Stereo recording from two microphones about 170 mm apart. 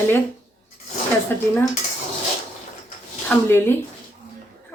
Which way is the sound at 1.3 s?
10° left (ahead or behind).